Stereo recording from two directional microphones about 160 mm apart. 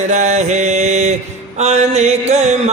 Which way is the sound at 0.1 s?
45° right (ahead or behind).